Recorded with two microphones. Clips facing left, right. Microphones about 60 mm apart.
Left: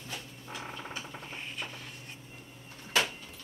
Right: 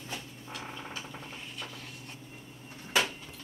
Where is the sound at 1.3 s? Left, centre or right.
Left.